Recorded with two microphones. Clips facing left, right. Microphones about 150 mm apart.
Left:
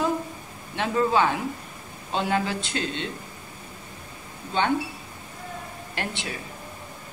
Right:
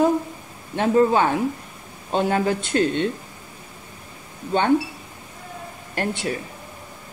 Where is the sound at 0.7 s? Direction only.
45° right (ahead or behind).